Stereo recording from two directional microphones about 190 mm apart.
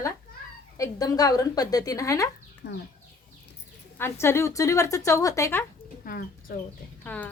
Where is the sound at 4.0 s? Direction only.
15° left (ahead or behind).